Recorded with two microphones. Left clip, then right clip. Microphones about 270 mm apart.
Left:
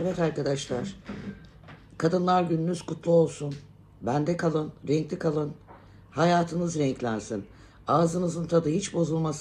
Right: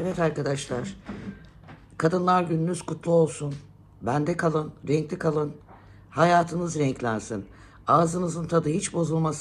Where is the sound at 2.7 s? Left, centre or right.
Centre.